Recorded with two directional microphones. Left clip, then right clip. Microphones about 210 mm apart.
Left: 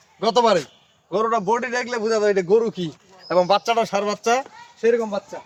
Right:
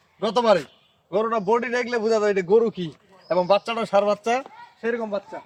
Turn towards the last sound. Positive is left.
turn(degrees=35)  # may be behind; listen again after turning